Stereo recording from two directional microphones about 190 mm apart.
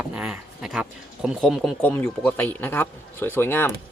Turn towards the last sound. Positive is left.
turn(degrees=10)  # may be behind; listen again after turning